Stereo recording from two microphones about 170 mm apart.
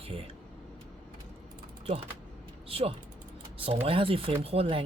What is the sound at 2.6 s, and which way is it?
Speech, 35° right (ahead or behind).